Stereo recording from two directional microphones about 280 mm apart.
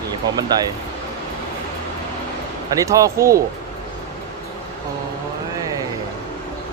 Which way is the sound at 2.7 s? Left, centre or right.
Centre.